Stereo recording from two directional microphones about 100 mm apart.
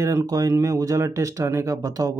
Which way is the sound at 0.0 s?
30° right (ahead or behind).